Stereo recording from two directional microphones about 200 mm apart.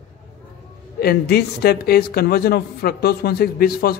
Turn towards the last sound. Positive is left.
turn(degrees=50)  # may be behind; listen again after turning